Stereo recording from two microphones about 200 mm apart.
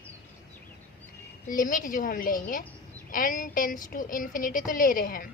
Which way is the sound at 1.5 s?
40° left (ahead or behind).